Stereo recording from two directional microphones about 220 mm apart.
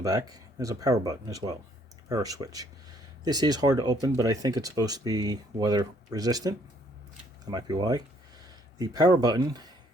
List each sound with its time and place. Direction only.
0.0 s speech: 15° right (ahead or behind)